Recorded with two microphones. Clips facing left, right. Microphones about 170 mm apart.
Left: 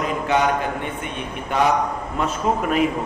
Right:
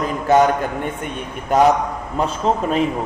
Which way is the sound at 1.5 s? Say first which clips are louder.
Right 6 dB; 40° right (ahead or behind).